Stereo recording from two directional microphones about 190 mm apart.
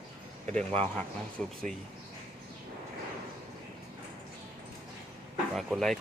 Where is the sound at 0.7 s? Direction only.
5° left (ahead or behind).